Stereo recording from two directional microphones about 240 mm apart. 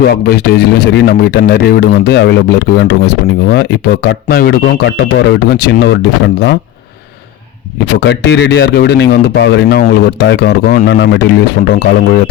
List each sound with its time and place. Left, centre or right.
0.1 s speech: left
8.0 s speech: left